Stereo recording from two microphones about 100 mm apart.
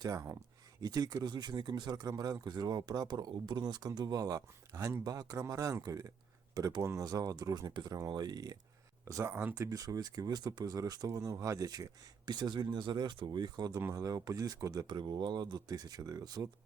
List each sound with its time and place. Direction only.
0.0 s speech: 35° right (ahead or behind)
9.3 s speech: 20° right (ahead or behind)
9.6 s speech: 35° right (ahead or behind)